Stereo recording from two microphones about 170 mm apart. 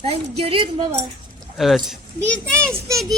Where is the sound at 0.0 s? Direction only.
35° right (ahead or behind).